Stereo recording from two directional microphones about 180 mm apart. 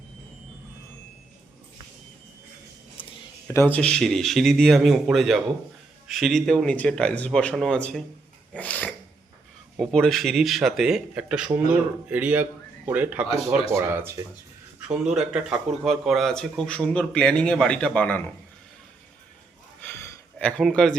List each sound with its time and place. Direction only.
3.4 s speech: 10° left (ahead or behind)
8.5 s a sound: 10° left (ahead or behind)
9.7 s speech: centre (ahead or behind)
20.4 s speech: 5° left (ahead or behind)